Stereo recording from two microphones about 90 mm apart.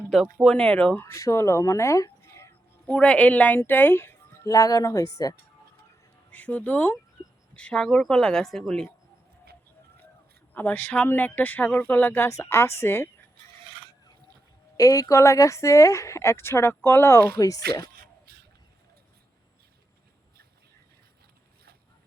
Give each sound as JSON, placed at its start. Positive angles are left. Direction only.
{"t": 0.4, "sound": "speech", "side_deg": 10}
{"t": 1.0, "sound": "speech", "side_deg": 35}
{"t": 2.8, "sound": "speech", "side_deg": 15}
{"t": 4.4, "sound": "speech", "side_deg": 40}
{"t": 6.3, "sound": "speech", "side_deg": 15}
{"t": 10.5, "sound": "speech", "side_deg": 20}
{"t": 12.3, "sound": "speech", "side_deg": 30}
{"t": 14.8, "sound": "speech", "side_deg": 40}